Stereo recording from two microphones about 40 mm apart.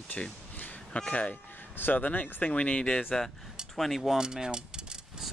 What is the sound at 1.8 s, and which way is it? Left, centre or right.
Speech, left.